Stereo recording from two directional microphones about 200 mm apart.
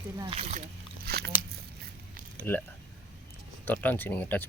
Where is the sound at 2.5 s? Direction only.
10° left (ahead or behind).